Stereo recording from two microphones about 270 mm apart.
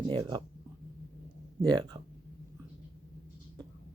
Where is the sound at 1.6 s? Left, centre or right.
Centre.